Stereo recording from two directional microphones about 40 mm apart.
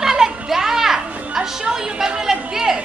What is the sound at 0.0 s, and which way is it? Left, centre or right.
Children playing, centre.